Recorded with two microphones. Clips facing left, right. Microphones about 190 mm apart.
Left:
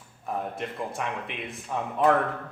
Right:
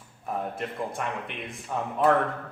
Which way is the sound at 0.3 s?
Centre (ahead or behind).